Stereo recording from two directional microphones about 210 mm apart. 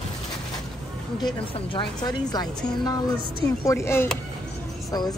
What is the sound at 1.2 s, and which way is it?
A woman's voice, 25° left (ahead or behind).